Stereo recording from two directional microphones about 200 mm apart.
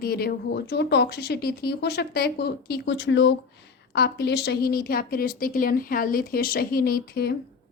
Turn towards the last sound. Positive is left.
turn(degrees=50)  # may be behind; listen again after turning